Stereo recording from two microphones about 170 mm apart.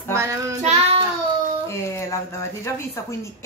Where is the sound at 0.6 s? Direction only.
40° right (ahead or behind).